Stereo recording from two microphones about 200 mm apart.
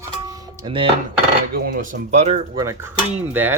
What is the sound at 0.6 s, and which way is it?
Speech, 25° right (ahead or behind).